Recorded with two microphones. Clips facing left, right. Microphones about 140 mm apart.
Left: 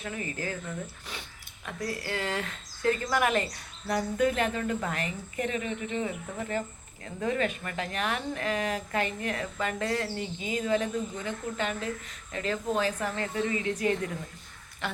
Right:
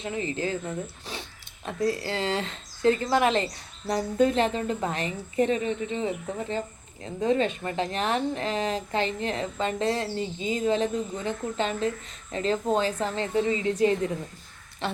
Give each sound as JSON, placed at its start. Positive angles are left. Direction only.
{"t": 0.0, "sound": "speech", "side_deg": -25}
{"t": 1.1, "sound": "dog", "side_deg": -30}
{"t": 1.6, "sound": "speech", "side_deg": -25}